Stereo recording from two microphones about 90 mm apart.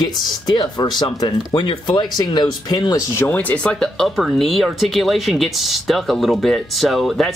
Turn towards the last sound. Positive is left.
turn(degrees=0)  # may be behind; listen again after turning